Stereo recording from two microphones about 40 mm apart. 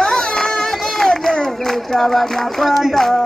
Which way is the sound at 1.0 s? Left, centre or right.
Centre.